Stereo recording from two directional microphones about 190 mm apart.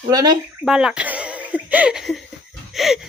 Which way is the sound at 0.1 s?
20° right (ahead or behind).